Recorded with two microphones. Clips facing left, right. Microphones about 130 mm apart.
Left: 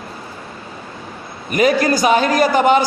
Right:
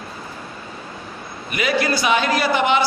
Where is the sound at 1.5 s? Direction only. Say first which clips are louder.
Left 6 dB; 40° left (ahead or behind).